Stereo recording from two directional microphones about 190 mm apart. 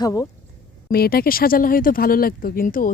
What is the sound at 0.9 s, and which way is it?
Speech, 50° left (ahead or behind).